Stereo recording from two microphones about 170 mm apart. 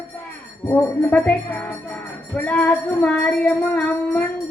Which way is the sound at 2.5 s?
10° left (ahead or behind).